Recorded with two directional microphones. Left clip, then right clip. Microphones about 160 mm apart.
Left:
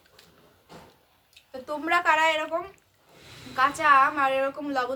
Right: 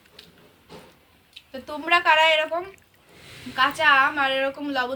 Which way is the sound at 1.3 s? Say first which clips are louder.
Even; 20° left (ahead or behind).